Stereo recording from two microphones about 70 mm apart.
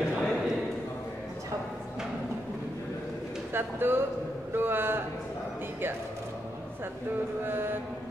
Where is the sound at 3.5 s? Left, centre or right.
Right.